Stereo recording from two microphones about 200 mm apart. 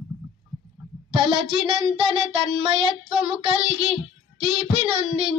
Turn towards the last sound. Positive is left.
turn(degrees=-30)  # may be behind; listen again after turning